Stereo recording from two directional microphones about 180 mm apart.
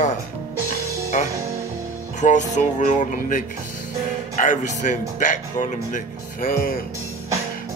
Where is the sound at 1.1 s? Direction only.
40° left (ahead or behind).